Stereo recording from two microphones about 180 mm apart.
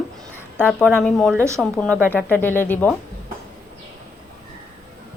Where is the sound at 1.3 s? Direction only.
15° right (ahead or behind).